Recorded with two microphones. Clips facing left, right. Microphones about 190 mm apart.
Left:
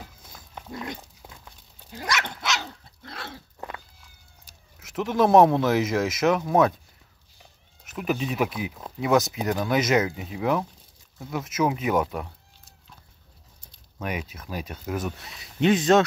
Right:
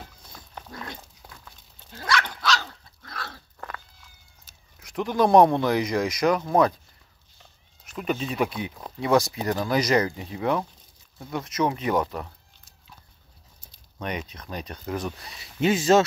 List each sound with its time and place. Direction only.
0.2 s dog: 5° left (ahead or behind)
0.7 s dog: 20° left (ahead or behind)
4.7 s speech: 5° left (ahead or behind)
7.8 s speech: 5° left (ahead or behind)
13.9 s speech: 5° left (ahead or behind)